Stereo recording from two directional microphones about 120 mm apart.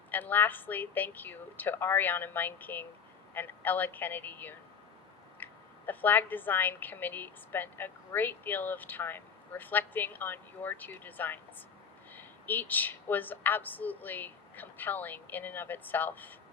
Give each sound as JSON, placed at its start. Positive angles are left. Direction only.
{"t": 0.1, "sound": "a woman's voice", "side_deg": 15}